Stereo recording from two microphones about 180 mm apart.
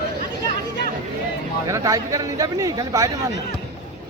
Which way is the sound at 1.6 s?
20° right (ahead or behind).